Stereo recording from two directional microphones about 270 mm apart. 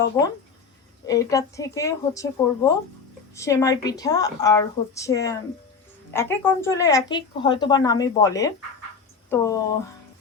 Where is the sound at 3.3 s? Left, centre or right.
Centre.